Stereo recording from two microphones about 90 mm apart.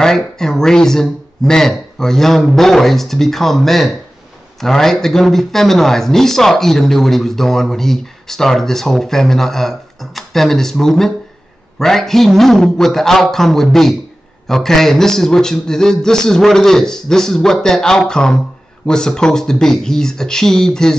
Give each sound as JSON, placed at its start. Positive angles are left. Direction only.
{"t": 0.0, "sound": "speech", "side_deg": 5}